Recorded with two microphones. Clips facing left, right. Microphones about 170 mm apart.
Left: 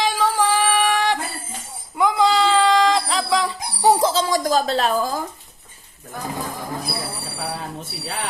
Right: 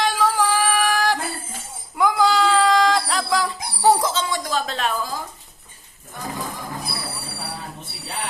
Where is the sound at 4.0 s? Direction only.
35° left (ahead or behind).